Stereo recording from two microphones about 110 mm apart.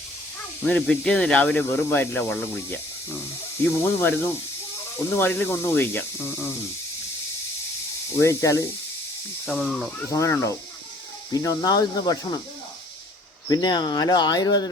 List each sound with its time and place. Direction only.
0.6 s speech: 5° left (ahead or behind)
8.2 s speech: 30° left (ahead or behind)
9.5 s speech: centre (ahead or behind)
10.1 s speech: 30° left (ahead or behind)
13.5 s speech: 40° left (ahead or behind)